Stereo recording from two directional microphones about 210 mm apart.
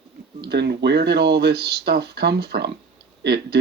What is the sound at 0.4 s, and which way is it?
Speech, 50° right (ahead or behind).